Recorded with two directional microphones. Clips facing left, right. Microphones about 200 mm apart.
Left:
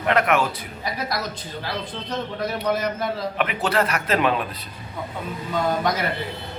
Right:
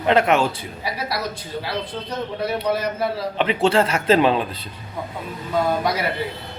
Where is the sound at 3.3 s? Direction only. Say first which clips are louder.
Right 6 dB; 30° right (ahead or behind).